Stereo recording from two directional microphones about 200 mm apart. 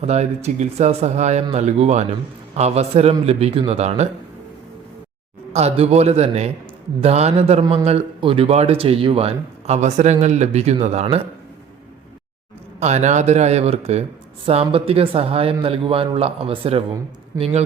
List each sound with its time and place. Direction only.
0.0 s speech: 35° right (ahead or behind)
5.5 s speech: 30° right (ahead or behind)
7.6 s speech: 20° right (ahead or behind)
12.8 s speech: 35° right (ahead or behind)